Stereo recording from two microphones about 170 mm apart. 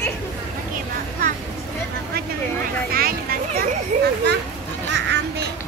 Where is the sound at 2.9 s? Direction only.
60° right (ahead or behind).